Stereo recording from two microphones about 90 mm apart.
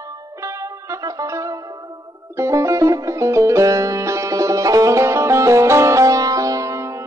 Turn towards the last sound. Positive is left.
turn(degrees=-35)  # may be behind; listen again after turning